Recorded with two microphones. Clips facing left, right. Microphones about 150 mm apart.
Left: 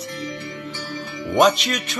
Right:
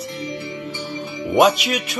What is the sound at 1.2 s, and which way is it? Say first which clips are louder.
Speech: right 1 dB; 10° right (ahead or behind).